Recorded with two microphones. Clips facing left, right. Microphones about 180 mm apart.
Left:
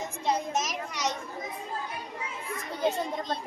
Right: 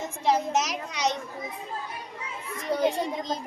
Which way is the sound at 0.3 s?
80° right.